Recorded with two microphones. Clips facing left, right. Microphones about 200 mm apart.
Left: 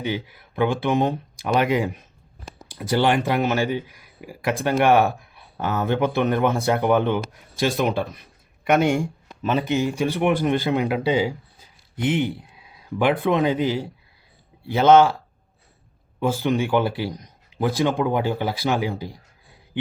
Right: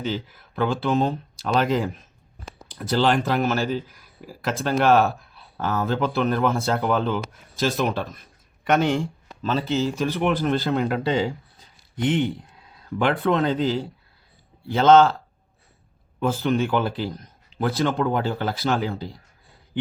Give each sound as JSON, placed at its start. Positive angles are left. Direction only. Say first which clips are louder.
{"t": 0.0, "sound": "speech", "louder": "left 1 dB", "side_deg": 15}
{"t": 16.2, "sound": "speech", "louder": "even", "side_deg": 10}